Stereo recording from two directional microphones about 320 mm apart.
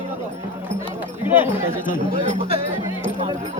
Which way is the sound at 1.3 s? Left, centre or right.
Centre.